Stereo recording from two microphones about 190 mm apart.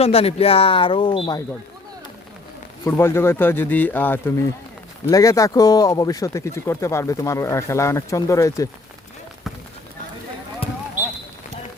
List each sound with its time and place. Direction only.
0.0 s speech: 30° left (ahead or behind)
2.8 s speech: 15° left (ahead or behind)